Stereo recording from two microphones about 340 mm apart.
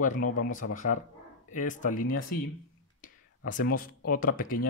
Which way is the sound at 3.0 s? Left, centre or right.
Left.